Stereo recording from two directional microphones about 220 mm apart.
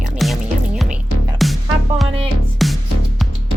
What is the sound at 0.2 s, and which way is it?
Music, centre (ahead or behind).